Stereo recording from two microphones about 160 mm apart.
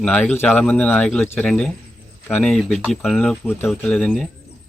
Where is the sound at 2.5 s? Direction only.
Centre (ahead or behind).